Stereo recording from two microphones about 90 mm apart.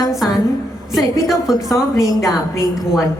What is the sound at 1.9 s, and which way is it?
Speech, 35° left (ahead or behind).